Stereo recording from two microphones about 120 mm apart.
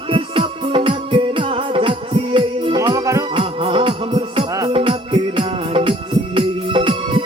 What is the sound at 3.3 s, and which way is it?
Music, 45° right (ahead or behind).